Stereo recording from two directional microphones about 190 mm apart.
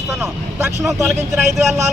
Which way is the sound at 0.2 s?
15° right (ahead or behind).